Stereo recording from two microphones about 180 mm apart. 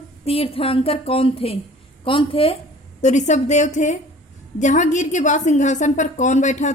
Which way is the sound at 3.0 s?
40° left (ahead or behind).